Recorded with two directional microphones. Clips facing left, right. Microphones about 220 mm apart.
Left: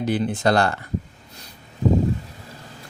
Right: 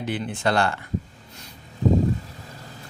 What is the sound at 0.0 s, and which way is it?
Speech, 40° left (ahead or behind).